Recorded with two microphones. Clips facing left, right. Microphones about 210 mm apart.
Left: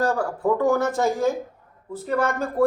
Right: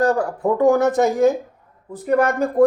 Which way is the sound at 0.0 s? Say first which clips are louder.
Right 4 dB; 20° right (ahead or behind).